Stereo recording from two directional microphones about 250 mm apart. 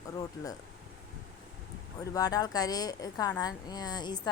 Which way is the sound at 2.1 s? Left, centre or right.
Centre.